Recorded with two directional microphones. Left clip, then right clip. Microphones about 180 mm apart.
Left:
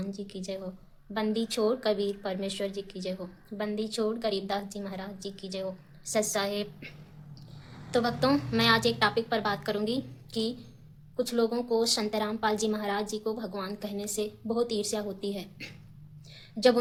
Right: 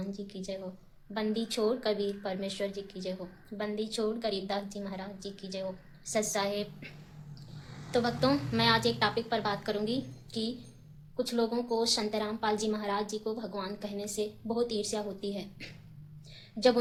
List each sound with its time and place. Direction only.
0.0 s a woman's voice: 20° left (ahead or behind)